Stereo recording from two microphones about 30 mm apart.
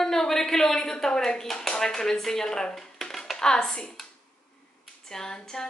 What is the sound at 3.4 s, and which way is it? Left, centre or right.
Speech, left.